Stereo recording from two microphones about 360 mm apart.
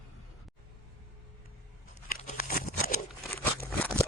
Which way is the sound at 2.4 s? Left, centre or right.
Left.